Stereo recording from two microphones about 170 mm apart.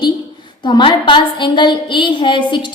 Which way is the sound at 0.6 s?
25° left (ahead or behind).